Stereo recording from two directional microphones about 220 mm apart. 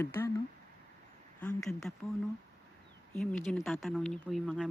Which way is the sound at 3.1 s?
5° left (ahead or behind).